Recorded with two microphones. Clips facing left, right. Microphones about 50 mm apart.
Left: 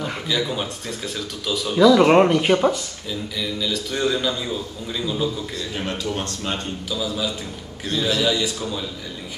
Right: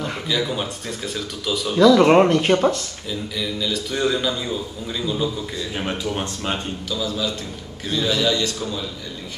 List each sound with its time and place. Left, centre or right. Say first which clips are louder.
0.0 s speech: even; centre
5.8 s speech: right 1 dB; centre
6.9 s a man's voice: right 1 dB; centre